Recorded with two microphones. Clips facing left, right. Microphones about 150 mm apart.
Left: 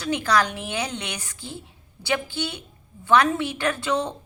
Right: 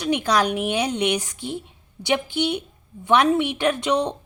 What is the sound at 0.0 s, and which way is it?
A woman's voice, 15° right (ahead or behind).